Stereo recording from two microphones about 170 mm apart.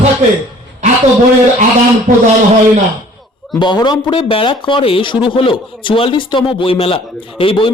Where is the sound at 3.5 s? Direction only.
25° left (ahead or behind).